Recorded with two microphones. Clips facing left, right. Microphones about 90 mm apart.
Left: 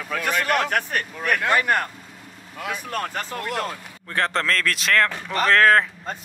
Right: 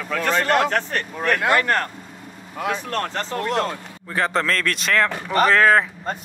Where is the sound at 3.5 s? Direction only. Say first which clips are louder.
Right 5 dB; 25° right (ahead or behind).